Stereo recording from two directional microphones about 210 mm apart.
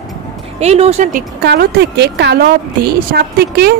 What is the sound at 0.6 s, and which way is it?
Speech, 30° right (ahead or behind).